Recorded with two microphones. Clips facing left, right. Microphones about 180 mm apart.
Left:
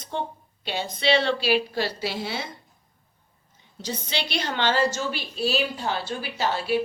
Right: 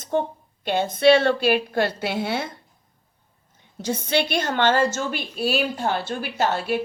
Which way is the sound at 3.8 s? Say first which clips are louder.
Right 8 dB; 55° right (ahead or behind).